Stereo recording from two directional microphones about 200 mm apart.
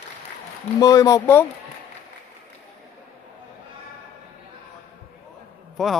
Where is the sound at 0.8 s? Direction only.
15° left (ahead or behind).